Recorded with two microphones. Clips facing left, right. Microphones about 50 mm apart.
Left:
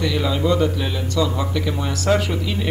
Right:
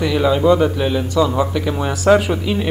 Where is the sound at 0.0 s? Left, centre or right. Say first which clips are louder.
Right 6 dB; centre.